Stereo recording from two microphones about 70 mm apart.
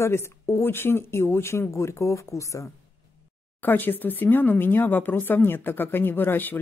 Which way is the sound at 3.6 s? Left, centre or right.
Left.